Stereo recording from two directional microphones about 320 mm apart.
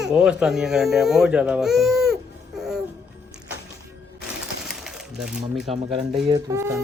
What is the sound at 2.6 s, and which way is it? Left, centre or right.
Music, centre.